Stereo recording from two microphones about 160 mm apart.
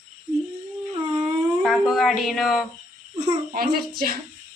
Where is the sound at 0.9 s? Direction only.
35° right (ahead or behind).